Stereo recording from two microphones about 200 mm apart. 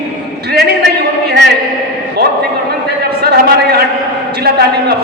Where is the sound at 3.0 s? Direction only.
50° right (ahead or behind).